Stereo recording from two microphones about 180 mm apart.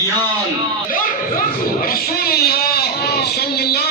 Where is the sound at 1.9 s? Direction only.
55° left (ahead or behind).